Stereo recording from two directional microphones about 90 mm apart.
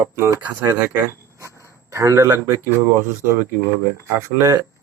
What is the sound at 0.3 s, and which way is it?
Speech, 20° right (ahead or behind).